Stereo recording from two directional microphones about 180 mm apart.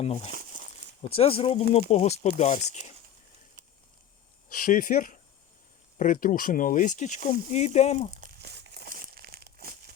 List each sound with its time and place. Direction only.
0.0 s speech: 35° left (ahead or behind)
0.3 s crumpling: 50° right (ahead or behind)
1.1 s speech: 30° left (ahead or behind)
4.4 s speech: 50° left (ahead or behind)
8.2 s crumpling: 65° right (ahead or behind)